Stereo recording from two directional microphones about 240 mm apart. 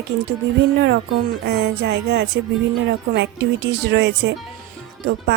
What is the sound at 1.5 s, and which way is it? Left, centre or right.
A woman's voice, right.